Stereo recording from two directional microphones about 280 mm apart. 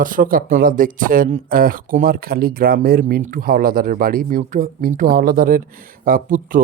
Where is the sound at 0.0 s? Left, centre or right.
Right.